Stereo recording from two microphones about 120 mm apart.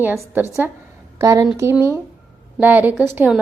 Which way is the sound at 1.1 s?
30° right (ahead or behind).